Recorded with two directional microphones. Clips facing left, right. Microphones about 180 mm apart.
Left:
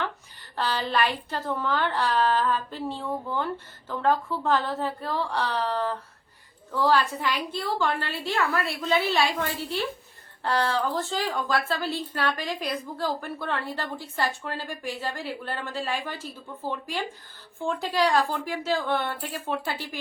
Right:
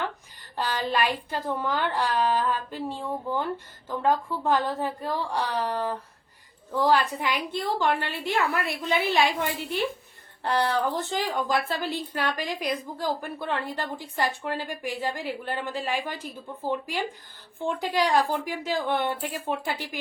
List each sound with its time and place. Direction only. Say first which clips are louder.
0.5 s a woman's voice: even; 10° right (ahead or behind)